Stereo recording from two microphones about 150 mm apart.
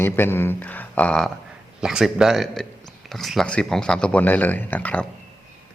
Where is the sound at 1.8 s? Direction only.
5° right (ahead or behind).